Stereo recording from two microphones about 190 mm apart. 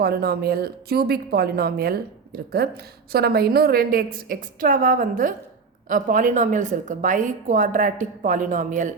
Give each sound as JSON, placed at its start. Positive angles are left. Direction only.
{"t": 0.0, "sound": "a woman's voice", "side_deg": -55}